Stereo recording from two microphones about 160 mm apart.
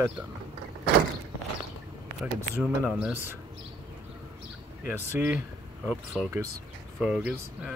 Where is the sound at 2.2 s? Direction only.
5° right (ahead or behind).